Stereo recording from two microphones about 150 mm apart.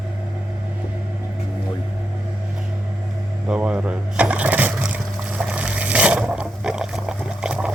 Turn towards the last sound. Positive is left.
turn(degrees=-5)  # may be behind; listen again after turning